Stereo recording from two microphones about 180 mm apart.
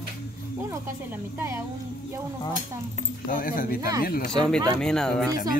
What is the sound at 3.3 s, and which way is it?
Speech, 50° left (ahead or behind).